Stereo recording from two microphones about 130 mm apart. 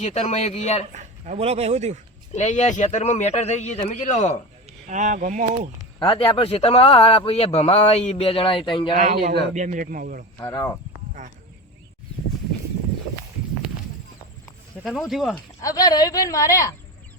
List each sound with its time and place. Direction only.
0.0 s a man's voice: 60° left (ahead or behind)
0.9 s speech: 60° right (ahead or behind)
2.3 s a man's voice: 65° left (ahead or behind)
4.9 s speech: 75° right (ahead or behind)
6.0 s a man's voice: 40° left (ahead or behind)
9.0 s a man's voice: 70° right (ahead or behind); by 10.2 s 90° right
10.4 s speech: 25° left (ahead or behind)
11.2 s speech: 70° right (ahead or behind)
14.8 s speech: centre (ahead or behind)
15.6 s speech: 30° left (ahead or behind)